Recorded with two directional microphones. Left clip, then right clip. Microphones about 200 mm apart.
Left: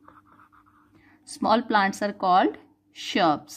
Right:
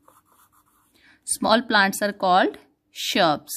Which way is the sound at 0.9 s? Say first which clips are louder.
Right 6 dB; 60° right (ahead or behind).